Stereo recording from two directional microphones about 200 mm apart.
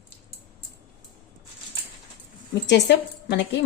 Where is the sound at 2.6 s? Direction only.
60° left (ahead or behind).